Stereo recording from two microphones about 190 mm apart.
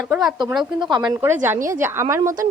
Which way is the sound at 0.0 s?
5° right (ahead or behind).